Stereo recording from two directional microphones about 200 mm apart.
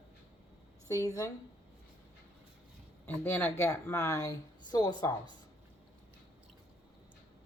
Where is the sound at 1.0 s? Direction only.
15° left (ahead or behind).